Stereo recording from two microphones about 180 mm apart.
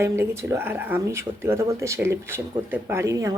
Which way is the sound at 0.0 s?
15° right (ahead or behind).